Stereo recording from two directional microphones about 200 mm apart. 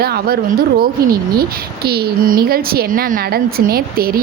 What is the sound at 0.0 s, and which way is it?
Speech, 50° right (ahead or behind).